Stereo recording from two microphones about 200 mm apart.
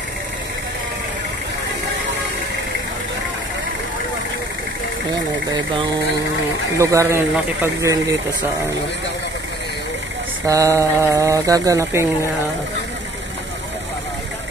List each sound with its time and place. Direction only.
5.1 s speech: 20° right (ahead or behind)
10.4 s speech: 15° right (ahead or behind)